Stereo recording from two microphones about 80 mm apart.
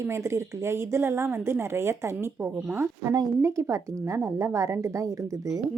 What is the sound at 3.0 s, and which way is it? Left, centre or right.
A woman's voice, right.